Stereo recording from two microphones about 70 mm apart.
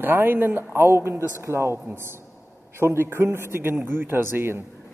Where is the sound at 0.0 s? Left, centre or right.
Right.